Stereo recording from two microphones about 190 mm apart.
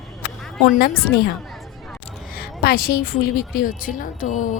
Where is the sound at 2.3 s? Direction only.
55° left (ahead or behind).